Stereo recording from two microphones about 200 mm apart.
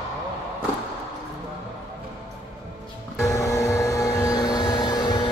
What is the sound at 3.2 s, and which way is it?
Vehicle, 15° left (ahead or behind).